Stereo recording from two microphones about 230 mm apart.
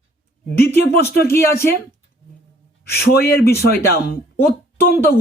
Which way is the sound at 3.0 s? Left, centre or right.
Left.